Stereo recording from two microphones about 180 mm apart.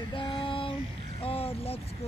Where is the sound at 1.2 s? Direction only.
30° left (ahead or behind).